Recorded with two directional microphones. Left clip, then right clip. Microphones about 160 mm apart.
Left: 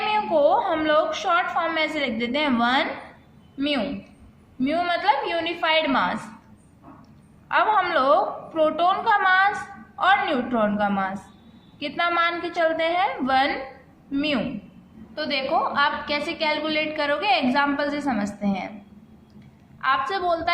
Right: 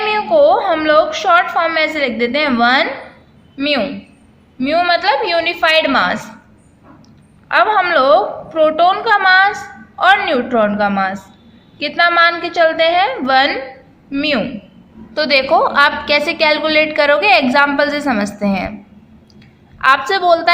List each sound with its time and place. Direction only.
0.1 s a woman's voice: 25° right (ahead or behind)
7.4 s a woman's voice: 20° right (ahead or behind)
15.1 s a woman's voice: 40° right (ahead or behind)
19.8 s a woman's voice: 40° right (ahead or behind)